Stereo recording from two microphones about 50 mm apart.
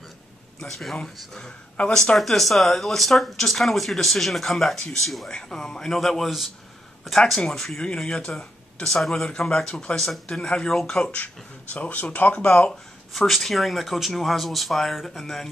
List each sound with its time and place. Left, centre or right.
0.6 s speech: centre
2.1 s speech: centre
5.3 s speech: centre
7.2 s speech: centre; by 12.4 s left
13.1 s speech: centre